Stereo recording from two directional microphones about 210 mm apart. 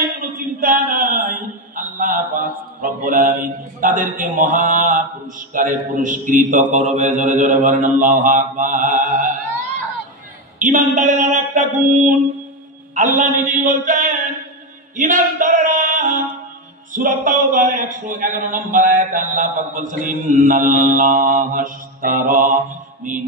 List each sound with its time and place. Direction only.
0.3 s a sound: 40° right (ahead or behind)
7.6 s mantra: 35° right (ahead or behind)
10.6 s mantra: 35° right (ahead or behind)
13.2 s mantra: 40° right (ahead or behind)
15.0 s a sound: 40° right (ahead or behind)
16.9 s mantra: 40° right (ahead or behind)